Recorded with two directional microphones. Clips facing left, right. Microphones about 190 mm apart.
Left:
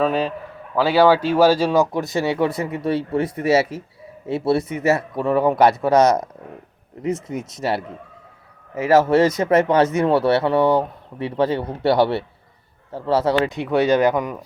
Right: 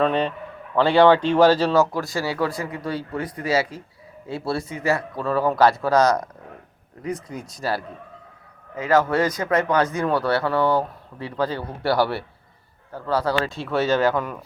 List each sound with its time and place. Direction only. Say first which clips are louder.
0.0 s a man's voice: left 1 dB; 5° left (ahead or behind)